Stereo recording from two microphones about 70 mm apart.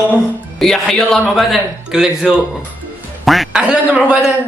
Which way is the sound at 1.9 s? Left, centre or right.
Centre.